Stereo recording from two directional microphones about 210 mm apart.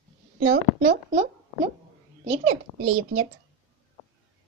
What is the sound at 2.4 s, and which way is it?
Speech, 90° right.